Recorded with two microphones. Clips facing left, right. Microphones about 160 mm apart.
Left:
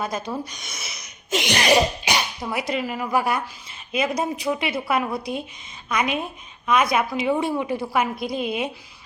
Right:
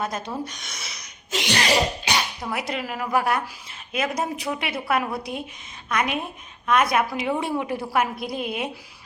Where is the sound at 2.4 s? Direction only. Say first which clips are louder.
Left 3 dB; centre (ahead or behind).